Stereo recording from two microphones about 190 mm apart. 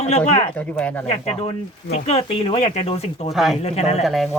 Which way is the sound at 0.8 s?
5° left (ahead or behind).